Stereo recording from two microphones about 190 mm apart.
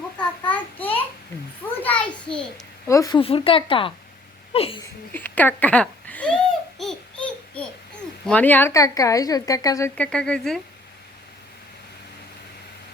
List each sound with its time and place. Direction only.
0.4 s a sound: 10° left (ahead or behind)
2.8 s speech: 15° left (ahead or behind)
3.2 s speech: 30° left (ahead or behind)
4.5 s a sound: 30° left (ahead or behind)
5.1 s babbling: 10° left (ahead or behind)
8.3 s speech: 10° left (ahead or behind)
9.9 s speech: 5° left (ahead or behind)